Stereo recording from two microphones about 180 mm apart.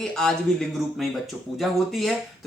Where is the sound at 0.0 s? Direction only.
Centre (ahead or behind).